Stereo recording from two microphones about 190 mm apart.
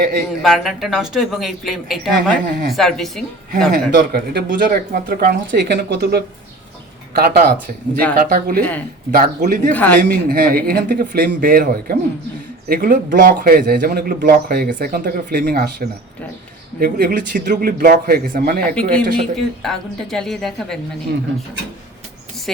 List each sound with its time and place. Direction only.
0.4 s speech: centre (ahead or behind)
3.7 s a man's voice: 60° right (ahead or behind)
9.7 s speech: 10° left (ahead or behind)
10.0 s a man's voice: 50° right (ahead or behind)
18.7 s speech: 5° left (ahead or behind)
22.5 s speech: centre (ahead or behind)